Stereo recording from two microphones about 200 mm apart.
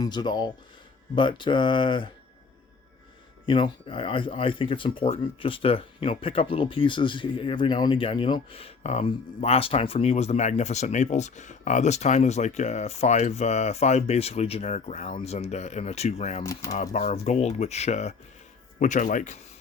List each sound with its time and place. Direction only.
0.0 s speech: 20° left (ahead or behind)
3.4 s speech: 25° left (ahead or behind)
16.4 s speech: 15° left (ahead or behind)
16.7 s speech: 35° left (ahead or behind)